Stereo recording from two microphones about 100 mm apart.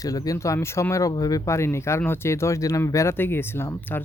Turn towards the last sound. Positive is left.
turn(degrees=20)  # may be behind; listen again after turning